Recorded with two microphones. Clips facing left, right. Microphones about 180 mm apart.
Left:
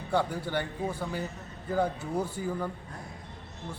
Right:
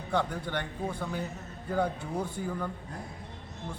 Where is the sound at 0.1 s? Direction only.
10° left (ahead or behind).